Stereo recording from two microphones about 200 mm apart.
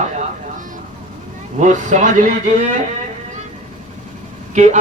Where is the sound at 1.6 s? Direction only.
40° right (ahead or behind).